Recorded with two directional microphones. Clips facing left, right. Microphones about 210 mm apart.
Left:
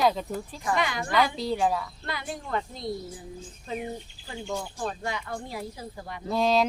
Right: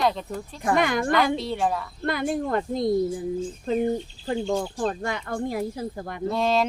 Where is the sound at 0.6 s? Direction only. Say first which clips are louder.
Right 7 dB; 50° right (ahead or behind).